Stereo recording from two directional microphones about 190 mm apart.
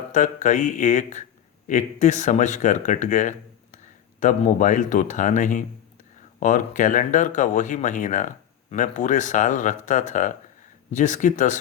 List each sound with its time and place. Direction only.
0.1 s speech: 40° left (ahead or behind)